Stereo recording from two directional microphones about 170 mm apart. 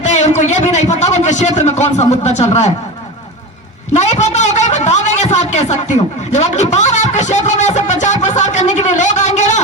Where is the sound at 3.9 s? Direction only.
40° left (ahead or behind).